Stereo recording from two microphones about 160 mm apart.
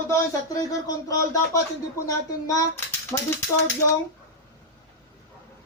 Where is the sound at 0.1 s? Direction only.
20° left (ahead or behind).